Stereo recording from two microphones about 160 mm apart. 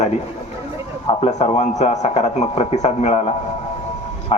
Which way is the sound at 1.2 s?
45° left (ahead or behind).